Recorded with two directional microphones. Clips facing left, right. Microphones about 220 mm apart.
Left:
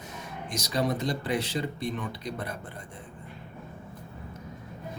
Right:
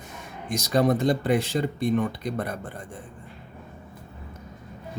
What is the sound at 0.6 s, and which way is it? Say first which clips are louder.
Speech: right 7 dB; 50° right (ahead or behind).